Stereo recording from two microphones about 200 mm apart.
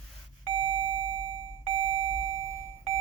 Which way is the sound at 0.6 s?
25° right (ahead or behind).